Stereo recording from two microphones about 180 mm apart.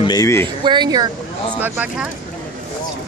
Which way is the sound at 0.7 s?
25° right (ahead or behind).